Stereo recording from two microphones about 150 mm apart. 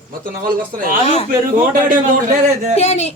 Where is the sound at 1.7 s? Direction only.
65° right (ahead or behind).